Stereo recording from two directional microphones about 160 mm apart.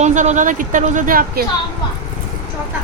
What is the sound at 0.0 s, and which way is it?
Speech, 50° right (ahead or behind).